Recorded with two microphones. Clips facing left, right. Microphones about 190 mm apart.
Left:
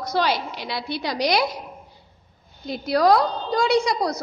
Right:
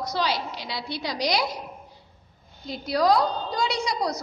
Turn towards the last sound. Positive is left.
turn(degrees=55)  # may be behind; listen again after turning